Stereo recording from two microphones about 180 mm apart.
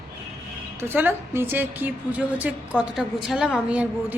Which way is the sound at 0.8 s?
10° right (ahead or behind).